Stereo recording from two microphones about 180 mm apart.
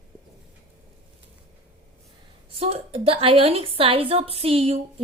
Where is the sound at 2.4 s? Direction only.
35° right (ahead or behind).